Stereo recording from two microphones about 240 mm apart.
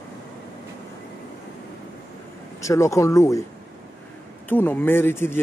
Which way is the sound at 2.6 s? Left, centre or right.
Centre.